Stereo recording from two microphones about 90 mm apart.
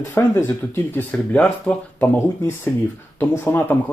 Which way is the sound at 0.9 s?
15° left (ahead or behind).